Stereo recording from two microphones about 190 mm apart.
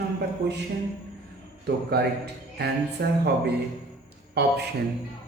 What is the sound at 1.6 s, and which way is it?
A man's voice, 60° right (ahead or behind).